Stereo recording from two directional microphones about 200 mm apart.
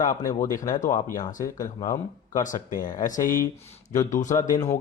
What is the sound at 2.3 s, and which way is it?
Speech, 40° left (ahead or behind).